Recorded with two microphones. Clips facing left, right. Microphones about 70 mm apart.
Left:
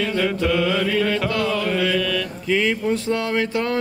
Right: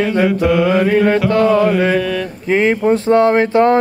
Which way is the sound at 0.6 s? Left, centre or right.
Right.